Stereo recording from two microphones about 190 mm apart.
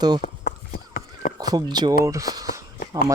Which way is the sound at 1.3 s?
20° right (ahead or behind).